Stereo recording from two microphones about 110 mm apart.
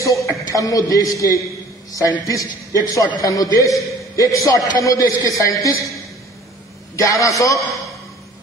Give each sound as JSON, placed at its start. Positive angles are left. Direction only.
{"t": 0.0, "sound": "a man's voice", "side_deg": 30}
{"t": 7.0, "sound": "a man's voice", "side_deg": 30}